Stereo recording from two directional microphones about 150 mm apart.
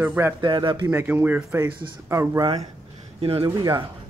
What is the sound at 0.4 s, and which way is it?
Speech, 30° right (ahead or behind).